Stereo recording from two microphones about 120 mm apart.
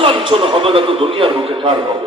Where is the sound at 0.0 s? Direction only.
50° right (ahead or behind).